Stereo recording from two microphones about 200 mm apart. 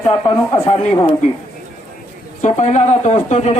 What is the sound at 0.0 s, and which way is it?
A man's voice, 15° left (ahead or behind).